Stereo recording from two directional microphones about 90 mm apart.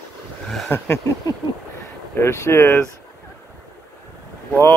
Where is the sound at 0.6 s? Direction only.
20° left (ahead or behind).